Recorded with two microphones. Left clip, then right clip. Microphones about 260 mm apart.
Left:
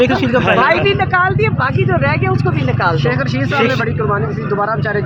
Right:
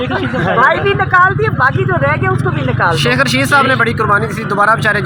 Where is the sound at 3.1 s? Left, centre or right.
Right.